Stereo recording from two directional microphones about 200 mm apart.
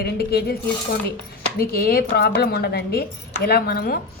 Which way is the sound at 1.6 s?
50° left (ahead or behind).